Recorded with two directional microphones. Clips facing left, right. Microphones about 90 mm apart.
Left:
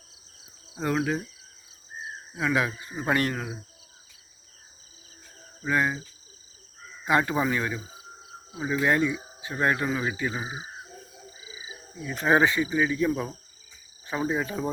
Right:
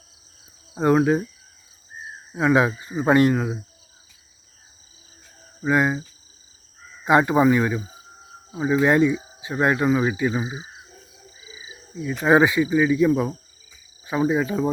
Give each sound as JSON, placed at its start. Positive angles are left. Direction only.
{"t": 0.7, "sound": "speech", "side_deg": -30}
{"t": 2.3, "sound": "speech", "side_deg": -25}
{"t": 5.6, "sound": "speech", "side_deg": -20}
{"t": 7.0, "sound": "speech", "side_deg": -20}
{"t": 11.3, "sound": "owl", "side_deg": 25}
{"t": 12.0, "sound": "speech", "side_deg": -10}